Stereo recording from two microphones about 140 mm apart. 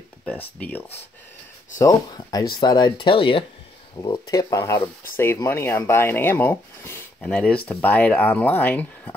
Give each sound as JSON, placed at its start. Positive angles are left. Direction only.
{"t": 0.2, "sound": "speech", "side_deg": 10}
{"t": 1.8, "sound": "speech", "side_deg": 25}
{"t": 4.0, "sound": "speech", "side_deg": 30}